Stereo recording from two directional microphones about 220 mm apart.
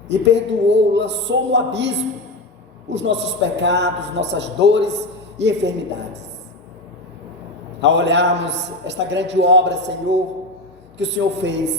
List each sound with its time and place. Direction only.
0.1 s a man's voice: 50° right (ahead or behind)
2.9 s a man's voice: 50° right (ahead or behind)
7.8 s a man's voice: 55° right (ahead or behind)